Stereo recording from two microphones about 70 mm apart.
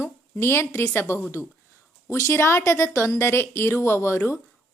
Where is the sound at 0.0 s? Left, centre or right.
Left.